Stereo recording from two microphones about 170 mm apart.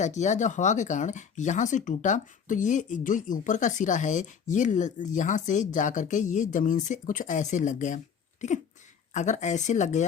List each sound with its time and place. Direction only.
0.0 s speech: 45° left (ahead or behind)